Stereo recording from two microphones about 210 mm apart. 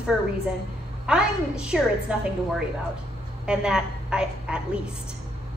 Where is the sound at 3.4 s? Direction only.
5° right (ahead or behind).